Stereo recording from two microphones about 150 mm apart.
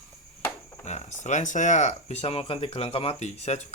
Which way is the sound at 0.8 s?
50° left (ahead or behind).